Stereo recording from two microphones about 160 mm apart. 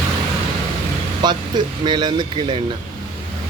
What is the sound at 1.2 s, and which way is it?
Speech, 25° right (ahead or behind).